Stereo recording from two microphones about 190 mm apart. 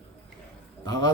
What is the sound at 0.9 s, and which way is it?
Speech, 20° left (ahead or behind).